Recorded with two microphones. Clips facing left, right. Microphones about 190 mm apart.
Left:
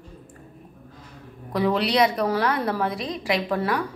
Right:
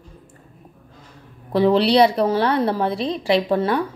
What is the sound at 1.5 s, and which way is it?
A woman's voice, 30° right (ahead or behind).